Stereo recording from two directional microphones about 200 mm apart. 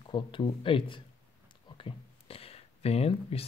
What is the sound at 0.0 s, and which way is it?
Speech, 25° left (ahead or behind).